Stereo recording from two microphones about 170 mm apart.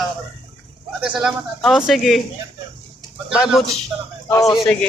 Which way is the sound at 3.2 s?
5° right (ahead or behind).